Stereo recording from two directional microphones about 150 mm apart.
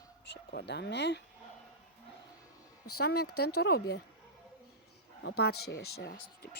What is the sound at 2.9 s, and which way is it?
Speech, 90° left.